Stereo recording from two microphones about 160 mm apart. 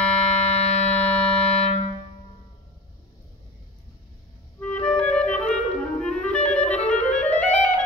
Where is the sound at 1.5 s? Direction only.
45° left (ahead or behind).